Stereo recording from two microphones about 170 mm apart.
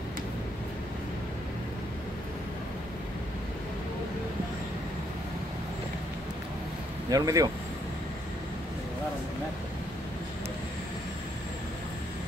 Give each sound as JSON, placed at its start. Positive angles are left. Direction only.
{"t": 7.1, "sound": "speech", "side_deg": -20}